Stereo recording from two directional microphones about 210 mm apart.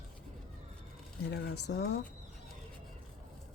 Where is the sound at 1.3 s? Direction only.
50° left (ahead or behind).